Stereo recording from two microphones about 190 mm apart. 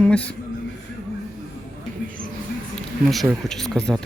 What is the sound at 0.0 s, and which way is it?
Speech, 5° left (ahead or behind).